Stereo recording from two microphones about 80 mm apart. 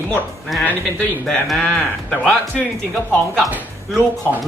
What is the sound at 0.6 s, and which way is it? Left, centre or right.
Speech, left.